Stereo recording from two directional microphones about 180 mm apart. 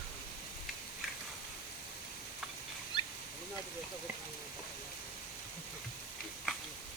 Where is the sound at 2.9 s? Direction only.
25° left (ahead or behind).